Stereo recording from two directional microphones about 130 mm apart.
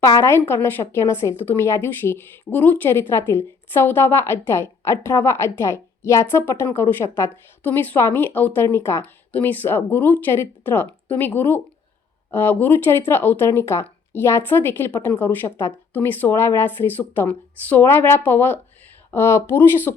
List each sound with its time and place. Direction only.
0.2 s a woman's voice: 20° left (ahead or behind)